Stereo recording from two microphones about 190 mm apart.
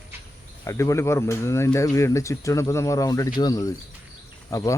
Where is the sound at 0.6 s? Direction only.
15° left (ahead or behind).